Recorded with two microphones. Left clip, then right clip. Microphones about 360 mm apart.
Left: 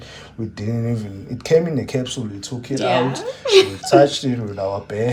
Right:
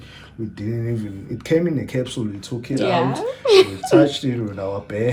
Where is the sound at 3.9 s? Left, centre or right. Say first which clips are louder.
Left 2 dB; centre.